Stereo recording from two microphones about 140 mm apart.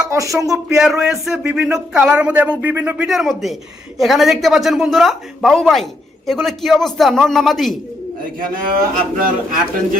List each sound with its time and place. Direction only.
0.1 s speech: 20° right (ahead or behind)
0.8 s speech: 5° right (ahead or behind)
8.7 s a man's voice: 85° right